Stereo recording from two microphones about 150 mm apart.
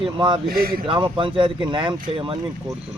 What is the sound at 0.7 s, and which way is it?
Speech, 35° right (ahead or behind).